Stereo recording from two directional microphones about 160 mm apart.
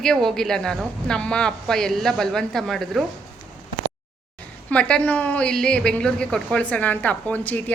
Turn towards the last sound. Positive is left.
turn(degrees=10)  # may be behind; listen again after turning